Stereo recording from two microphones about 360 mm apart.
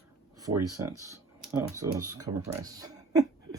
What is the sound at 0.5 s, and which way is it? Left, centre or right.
Speech, right.